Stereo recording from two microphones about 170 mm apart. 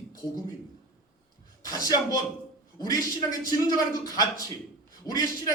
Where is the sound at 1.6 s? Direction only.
20° left (ahead or behind).